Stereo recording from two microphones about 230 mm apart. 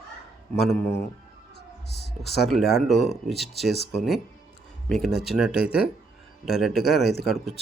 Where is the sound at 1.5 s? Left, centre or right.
Left.